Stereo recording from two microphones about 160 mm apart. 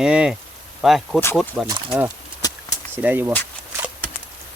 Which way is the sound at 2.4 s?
25° left (ahead or behind).